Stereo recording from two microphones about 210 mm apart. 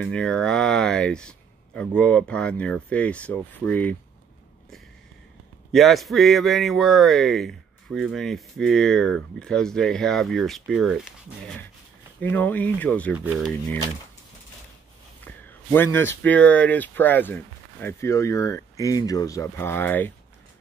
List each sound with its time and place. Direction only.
0.0 s speech: 5° left (ahead or behind)
5.7 s speech: centre (ahead or behind)
13.2 s speech: 10° right (ahead or behind)
15.2 s a sound: 10° left (ahead or behind)
16.2 s speech: 5° left (ahead or behind)